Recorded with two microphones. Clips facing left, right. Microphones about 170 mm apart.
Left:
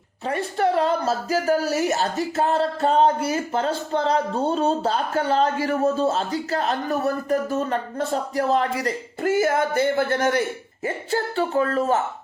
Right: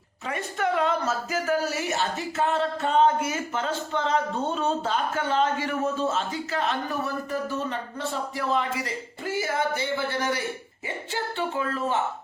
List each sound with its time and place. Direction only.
0.3 s speech: 35° left (ahead or behind)